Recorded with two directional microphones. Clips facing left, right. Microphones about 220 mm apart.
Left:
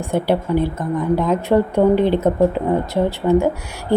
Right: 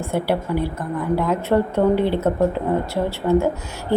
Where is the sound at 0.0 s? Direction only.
20° left (ahead or behind).